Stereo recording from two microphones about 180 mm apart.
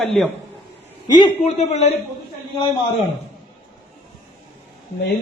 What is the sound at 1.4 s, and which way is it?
Speech, 35° left (ahead or behind).